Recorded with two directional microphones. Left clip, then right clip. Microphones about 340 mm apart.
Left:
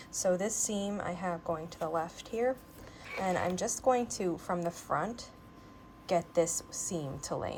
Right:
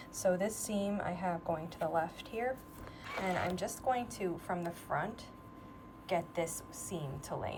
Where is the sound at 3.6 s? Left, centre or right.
Centre.